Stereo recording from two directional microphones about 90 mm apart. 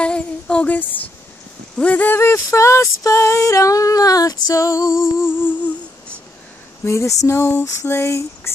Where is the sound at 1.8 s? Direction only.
20° left (ahead or behind); by 4.9 s 35° left (ahead or behind).